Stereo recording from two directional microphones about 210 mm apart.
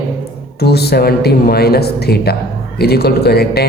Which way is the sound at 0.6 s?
50° left (ahead or behind).